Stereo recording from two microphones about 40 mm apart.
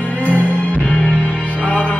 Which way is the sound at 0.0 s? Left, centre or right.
Left.